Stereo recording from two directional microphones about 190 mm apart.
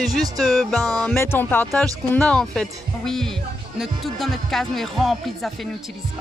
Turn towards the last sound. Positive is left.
turn(degrees=0)  # may be behind; listen again after turning